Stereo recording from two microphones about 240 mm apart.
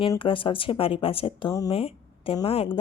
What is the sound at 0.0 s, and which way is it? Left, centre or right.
Speech, left.